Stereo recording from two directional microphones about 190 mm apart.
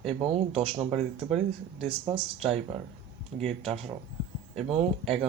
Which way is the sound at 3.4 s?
Centre (ahead or behind).